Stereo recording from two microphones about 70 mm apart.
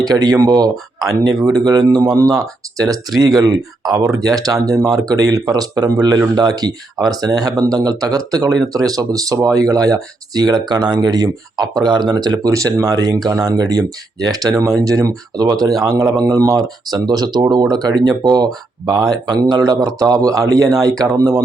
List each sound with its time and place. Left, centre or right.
0.0 s speech: right
2.2 s speech: right
12.5 s speech: right
12.8 s speech: right